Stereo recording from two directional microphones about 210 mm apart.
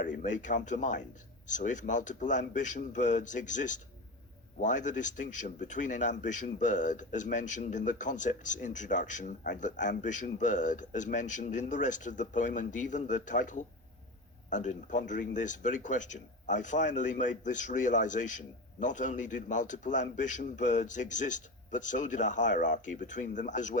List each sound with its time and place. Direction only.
0.0 s speech: 40° left (ahead or behind)